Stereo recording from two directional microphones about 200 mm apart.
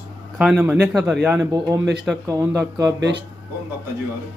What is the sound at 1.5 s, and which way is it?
Speech, 15° right (ahead or behind).